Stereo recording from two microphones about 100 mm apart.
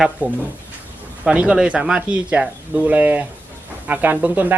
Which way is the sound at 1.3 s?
10° right (ahead or behind).